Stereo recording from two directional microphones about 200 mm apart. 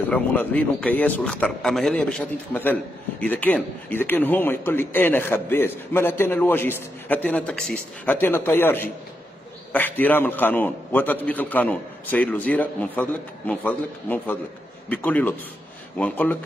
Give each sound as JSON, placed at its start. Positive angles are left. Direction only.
{"t": 0.0, "sound": "a man's voice", "side_deg": 10}